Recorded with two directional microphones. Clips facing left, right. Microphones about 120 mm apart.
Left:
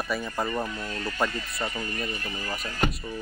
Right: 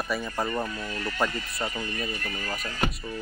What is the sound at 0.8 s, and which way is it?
Speech, 25° left (ahead or behind).